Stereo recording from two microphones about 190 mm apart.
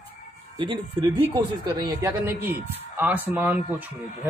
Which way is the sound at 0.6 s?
25° right (ahead or behind).